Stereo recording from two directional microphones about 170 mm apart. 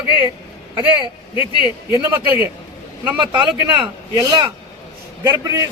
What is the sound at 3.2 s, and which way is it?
A man's voice, 25° right (ahead or behind).